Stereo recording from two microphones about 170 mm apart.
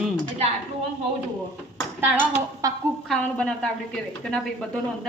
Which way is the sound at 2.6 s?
20° right (ahead or behind).